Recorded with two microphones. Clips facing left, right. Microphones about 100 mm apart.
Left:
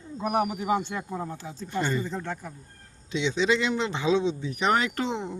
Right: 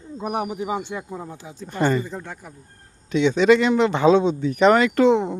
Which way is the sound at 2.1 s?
10° right (ahead or behind).